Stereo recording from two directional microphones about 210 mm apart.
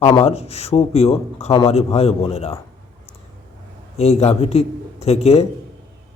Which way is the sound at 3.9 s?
30° left (ahead or behind).